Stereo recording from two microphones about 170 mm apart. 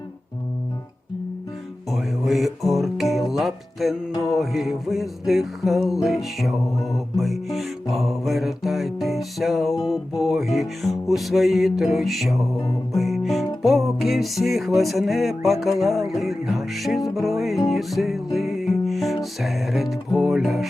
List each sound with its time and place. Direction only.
1.9 s music: centre (ahead or behind)
4.1 s music: 20° left (ahead or behind)
4.4 s music: centre (ahead or behind)
6.7 s music: 20° left (ahead or behind)
7.2 s music: centre (ahead or behind)